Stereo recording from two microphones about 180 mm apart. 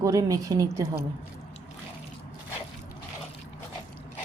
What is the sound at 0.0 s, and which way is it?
Speech, 20° right (ahead or behind).